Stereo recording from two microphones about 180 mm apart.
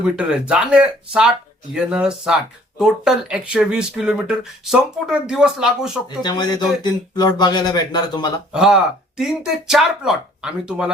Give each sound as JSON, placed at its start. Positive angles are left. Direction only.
{"t": 0.0, "sound": "speech", "side_deg": -5}
{"t": 6.1, "sound": "speech", "side_deg": 25}
{"t": 8.5, "sound": "speech", "side_deg": -5}